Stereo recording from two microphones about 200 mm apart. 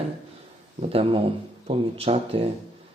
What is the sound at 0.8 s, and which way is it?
Speech, 30° right (ahead or behind).